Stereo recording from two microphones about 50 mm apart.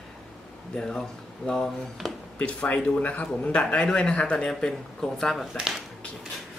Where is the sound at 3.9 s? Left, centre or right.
Centre.